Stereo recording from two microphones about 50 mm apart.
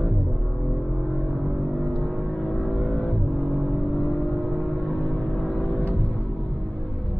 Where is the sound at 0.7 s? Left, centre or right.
Centre.